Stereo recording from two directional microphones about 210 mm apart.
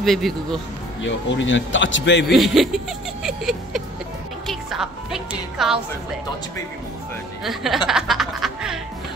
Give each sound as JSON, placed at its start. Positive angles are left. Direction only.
{"t": 0.0, "sound": "speech", "side_deg": 0}
{"t": 1.0, "sound": "speech", "side_deg": 60}
{"t": 2.2, "sound": "speech", "side_deg": 0}
{"t": 4.5, "sound": "music", "side_deg": 0}
{"t": 7.4, "sound": "speech", "side_deg": 0}